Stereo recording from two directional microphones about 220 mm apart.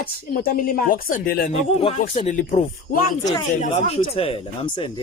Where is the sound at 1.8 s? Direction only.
25° left (ahead or behind).